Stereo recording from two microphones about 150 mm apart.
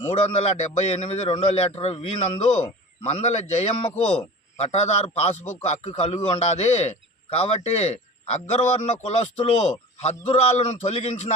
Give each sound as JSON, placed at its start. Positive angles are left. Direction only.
{"t": 0.0, "sound": "a man's voice", "side_deg": 40}